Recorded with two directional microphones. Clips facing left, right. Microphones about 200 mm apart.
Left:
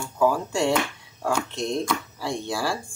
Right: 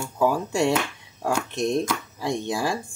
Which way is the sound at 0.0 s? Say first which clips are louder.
Even; 15° right (ahead or behind).